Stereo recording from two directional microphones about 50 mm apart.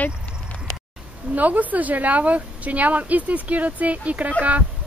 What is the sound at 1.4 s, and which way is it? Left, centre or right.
Speech, right.